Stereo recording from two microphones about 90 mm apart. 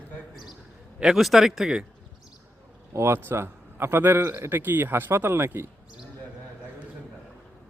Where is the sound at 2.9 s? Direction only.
30° right (ahead or behind).